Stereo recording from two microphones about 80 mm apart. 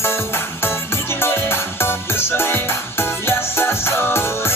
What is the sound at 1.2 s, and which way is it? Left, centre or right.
Music, left.